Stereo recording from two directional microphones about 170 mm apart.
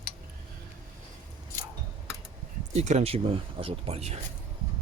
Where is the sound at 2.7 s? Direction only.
40° right (ahead or behind).